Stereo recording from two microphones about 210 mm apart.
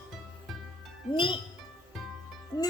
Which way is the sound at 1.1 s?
25° left (ahead or behind).